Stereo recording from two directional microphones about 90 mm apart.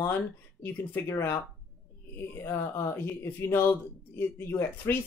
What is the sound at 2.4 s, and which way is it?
Speech, 30° left (ahead or behind).